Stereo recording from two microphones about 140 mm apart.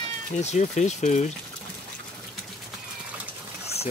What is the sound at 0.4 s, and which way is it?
Speech, 55° left (ahead or behind).